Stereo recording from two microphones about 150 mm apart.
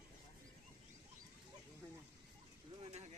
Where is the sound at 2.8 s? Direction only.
45° right (ahead or behind).